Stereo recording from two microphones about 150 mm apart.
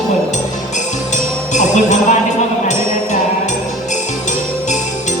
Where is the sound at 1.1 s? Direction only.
55° left (ahead or behind).